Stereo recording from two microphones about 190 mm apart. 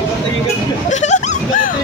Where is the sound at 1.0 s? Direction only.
40° left (ahead or behind).